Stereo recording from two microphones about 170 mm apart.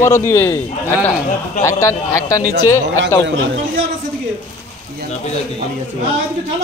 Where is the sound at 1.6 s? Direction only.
20° left (ahead or behind).